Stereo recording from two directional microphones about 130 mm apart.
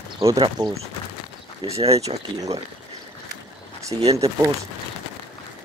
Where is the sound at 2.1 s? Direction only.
50° right (ahead or behind).